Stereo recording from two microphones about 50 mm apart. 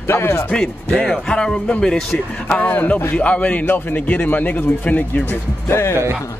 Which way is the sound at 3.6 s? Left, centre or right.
Left.